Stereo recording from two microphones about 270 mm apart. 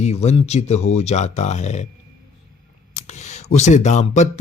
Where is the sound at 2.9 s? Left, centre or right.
Left.